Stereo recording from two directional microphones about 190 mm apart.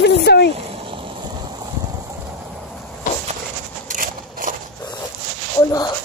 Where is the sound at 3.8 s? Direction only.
45° right (ahead or behind).